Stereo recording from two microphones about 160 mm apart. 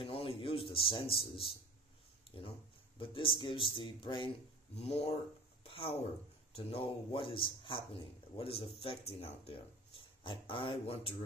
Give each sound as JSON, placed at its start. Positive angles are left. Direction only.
{"t": 0.0, "sound": "a man's voice", "side_deg": 35}
{"t": 5.6, "sound": "a sound", "side_deg": 35}
{"t": 6.5, "sound": "a man's voice", "side_deg": 40}
{"t": 9.9, "sound": "speech", "side_deg": 30}